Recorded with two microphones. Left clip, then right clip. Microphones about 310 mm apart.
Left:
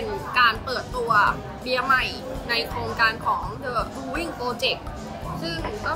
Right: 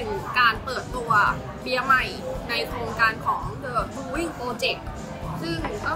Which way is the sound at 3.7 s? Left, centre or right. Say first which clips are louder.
Even; centre.